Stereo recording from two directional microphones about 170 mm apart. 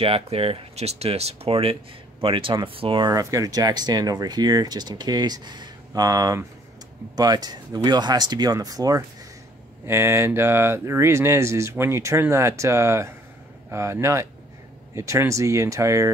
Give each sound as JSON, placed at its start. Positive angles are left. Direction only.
{"t": 0.0, "sound": "speech", "side_deg": -35}